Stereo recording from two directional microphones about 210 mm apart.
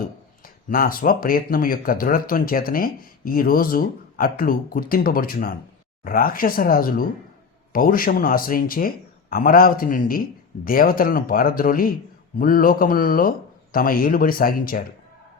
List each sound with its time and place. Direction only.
0.4 s speech: 45° left (ahead or behind)